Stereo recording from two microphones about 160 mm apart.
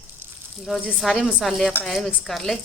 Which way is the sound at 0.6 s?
Centre (ahead or behind).